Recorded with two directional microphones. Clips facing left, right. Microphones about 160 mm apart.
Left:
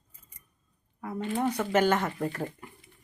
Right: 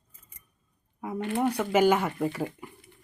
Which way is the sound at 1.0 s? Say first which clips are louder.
Right 3 dB; 20° right (ahead or behind).